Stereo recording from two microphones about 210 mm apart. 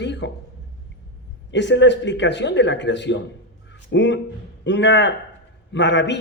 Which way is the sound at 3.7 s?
60° left (ahead or behind).